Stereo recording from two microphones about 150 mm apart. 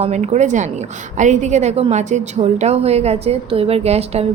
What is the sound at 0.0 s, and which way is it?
A woman's voice, 50° right (ahead or behind).